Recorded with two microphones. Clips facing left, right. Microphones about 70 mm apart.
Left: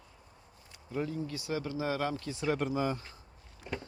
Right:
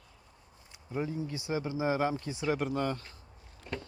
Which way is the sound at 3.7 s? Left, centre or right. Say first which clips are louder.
Even; centre.